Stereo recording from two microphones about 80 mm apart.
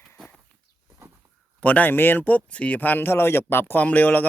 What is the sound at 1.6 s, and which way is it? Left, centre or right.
Speech, centre.